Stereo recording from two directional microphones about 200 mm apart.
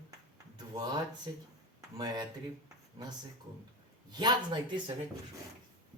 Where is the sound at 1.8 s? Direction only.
20° right (ahead or behind).